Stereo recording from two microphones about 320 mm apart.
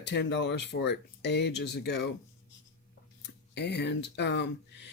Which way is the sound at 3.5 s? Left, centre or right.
Left.